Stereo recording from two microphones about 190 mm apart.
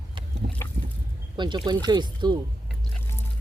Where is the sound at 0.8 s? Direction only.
50° right (ahead or behind).